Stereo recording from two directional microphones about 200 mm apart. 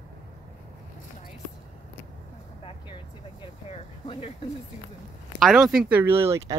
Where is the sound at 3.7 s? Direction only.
25° left (ahead or behind).